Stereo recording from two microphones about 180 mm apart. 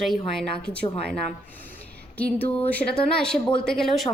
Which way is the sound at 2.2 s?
10° left (ahead or behind).